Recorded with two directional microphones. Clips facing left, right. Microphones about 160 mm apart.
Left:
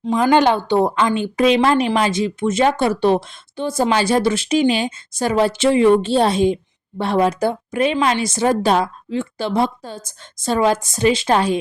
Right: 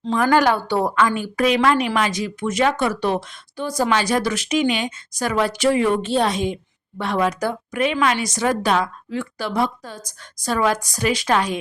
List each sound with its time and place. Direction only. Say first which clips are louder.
0.0 s a woman's voice: left 3 dB; 15° left (ahead or behind)